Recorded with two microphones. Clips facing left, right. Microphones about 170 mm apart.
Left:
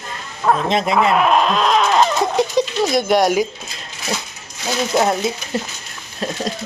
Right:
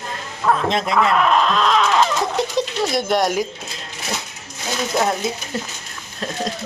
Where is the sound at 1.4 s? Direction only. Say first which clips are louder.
Left 1 dB; 45° left (ahead or behind).